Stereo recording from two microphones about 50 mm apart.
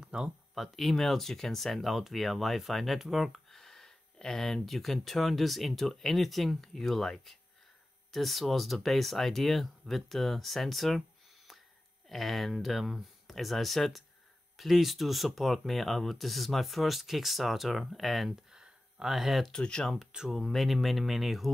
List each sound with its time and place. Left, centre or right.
0.0 s a sound: centre
0.6 s speech: centre
18.5 s a sound: centre
19.5 s speech: centre
20.1 s speech: centre
20.3 s speech: centre